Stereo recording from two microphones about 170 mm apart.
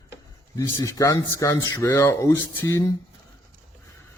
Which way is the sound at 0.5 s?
20° left (ahead or behind).